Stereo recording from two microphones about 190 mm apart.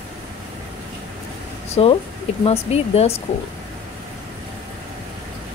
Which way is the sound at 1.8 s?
30° left (ahead or behind).